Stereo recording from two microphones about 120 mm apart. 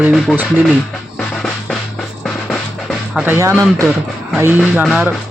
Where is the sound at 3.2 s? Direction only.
15° right (ahead or behind).